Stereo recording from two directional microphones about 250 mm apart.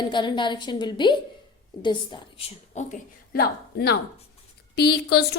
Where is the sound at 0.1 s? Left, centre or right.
Centre.